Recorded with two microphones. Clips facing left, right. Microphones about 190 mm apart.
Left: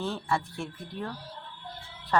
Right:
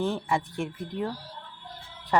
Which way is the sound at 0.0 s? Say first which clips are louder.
Right 3 dB; 15° right (ahead or behind).